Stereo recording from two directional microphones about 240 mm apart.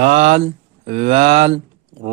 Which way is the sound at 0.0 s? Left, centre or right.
Right.